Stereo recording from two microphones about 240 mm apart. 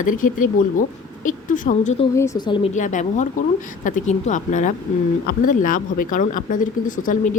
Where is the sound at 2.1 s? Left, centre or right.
Centre.